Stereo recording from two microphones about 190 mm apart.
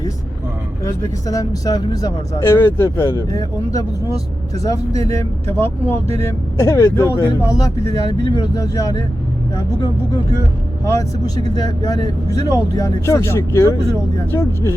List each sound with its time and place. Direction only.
0.9 s speech: 20° left (ahead or behind)
11.5 s speech: 20° left (ahead or behind)